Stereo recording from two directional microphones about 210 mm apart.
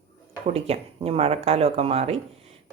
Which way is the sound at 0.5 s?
30° right (ahead or behind).